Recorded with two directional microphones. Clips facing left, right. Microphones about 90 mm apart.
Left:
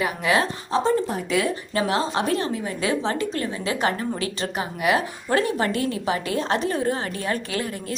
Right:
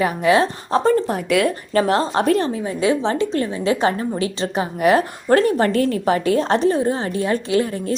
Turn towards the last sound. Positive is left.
turn(degrees=-30)  # may be behind; listen again after turning